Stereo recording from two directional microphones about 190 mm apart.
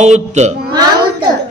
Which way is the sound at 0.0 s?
35° right (ahead or behind).